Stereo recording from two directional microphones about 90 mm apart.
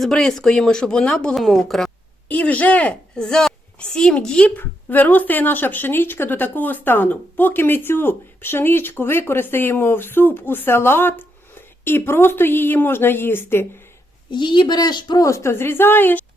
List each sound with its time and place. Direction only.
0.0 s a woman's voice: 5° left (ahead or behind)
2.3 s a woman's voice: 15° left (ahead or behind)
14.3 s speech: 55° left (ahead or behind)
15.2 s a woman's voice: 35° left (ahead or behind)